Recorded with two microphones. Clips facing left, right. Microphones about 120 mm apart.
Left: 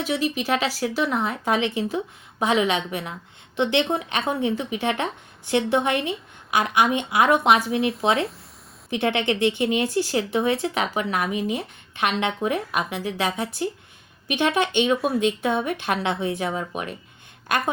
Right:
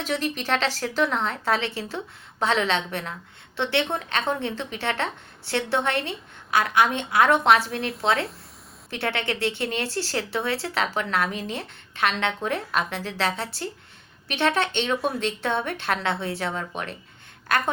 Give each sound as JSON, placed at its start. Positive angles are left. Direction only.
{"t": 0.0, "sound": "speech", "side_deg": 5}
{"t": 7.8, "sound": "speech", "side_deg": 0}
{"t": 8.0, "sound": "speech", "side_deg": 25}